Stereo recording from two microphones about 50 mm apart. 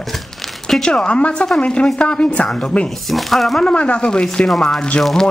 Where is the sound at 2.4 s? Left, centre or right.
Centre.